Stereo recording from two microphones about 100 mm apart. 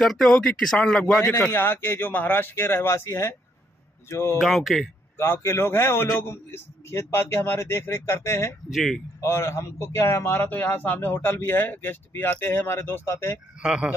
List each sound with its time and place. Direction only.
0.0 s speech: 5° left (ahead or behind)
1.4 s a man's voice: 20° left (ahead or behind)
4.4 s speech: centre (ahead or behind)
5.1 s a man's voice: 25° left (ahead or behind)
8.6 s speech: centre (ahead or behind)
9.2 s a man's voice: 25° left (ahead or behind)
13.6 s speech: 10° right (ahead or behind)